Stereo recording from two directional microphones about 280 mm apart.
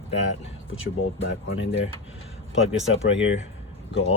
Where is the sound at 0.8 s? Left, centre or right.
Left.